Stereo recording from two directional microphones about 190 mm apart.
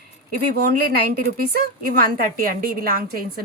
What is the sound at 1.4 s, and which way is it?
A woman's voice, 50° right (ahead or behind).